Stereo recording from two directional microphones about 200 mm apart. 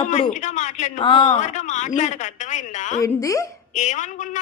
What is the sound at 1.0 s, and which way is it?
Speech, 25° left (ahead or behind).